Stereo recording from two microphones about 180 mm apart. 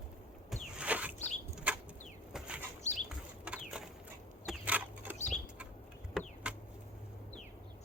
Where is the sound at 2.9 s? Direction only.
40° left (ahead or behind).